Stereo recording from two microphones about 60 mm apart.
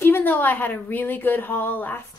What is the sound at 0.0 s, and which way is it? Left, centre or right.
Speech, left.